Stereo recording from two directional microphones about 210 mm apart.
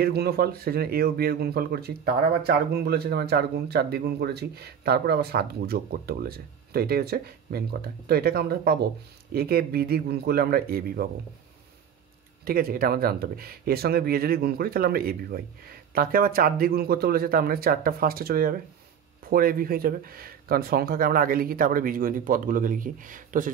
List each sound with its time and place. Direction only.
0.0 s speech: 50° right (ahead or behind)
12.4 s speech: 45° right (ahead or behind)